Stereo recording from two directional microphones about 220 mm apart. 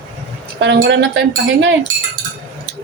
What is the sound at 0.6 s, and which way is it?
Cutlery, 50° right (ahead or behind).